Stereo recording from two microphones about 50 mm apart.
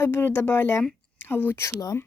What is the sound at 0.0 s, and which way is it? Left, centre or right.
Speech, left.